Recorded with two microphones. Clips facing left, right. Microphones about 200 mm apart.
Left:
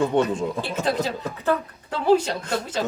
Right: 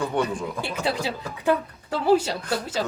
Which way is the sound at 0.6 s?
10° right (ahead or behind).